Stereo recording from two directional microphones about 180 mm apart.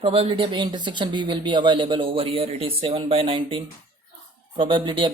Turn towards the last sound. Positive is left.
turn(degrees=-25)  # may be behind; listen again after turning